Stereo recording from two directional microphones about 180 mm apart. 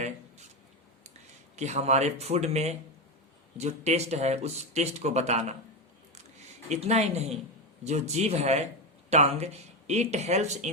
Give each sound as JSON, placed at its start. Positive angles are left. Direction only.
{"t": 1.5, "sound": "speech", "side_deg": -40}
{"t": 6.7, "sound": "speech", "side_deg": -35}